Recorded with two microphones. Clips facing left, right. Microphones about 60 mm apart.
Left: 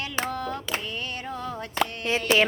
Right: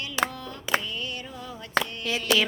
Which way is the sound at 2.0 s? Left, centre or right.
Left.